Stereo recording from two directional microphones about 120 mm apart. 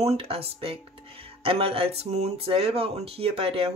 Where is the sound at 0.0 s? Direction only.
60° right (ahead or behind).